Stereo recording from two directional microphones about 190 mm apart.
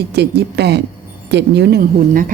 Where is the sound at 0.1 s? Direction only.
60° right (ahead or behind).